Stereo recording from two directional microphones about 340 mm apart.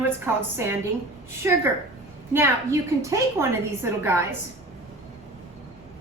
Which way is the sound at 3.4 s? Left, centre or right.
Centre.